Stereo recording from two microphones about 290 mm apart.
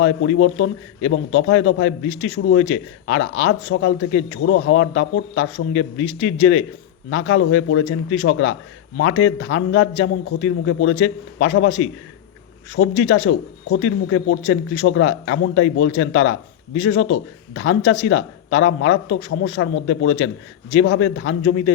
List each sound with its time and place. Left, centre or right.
0.0 s a man's voice: left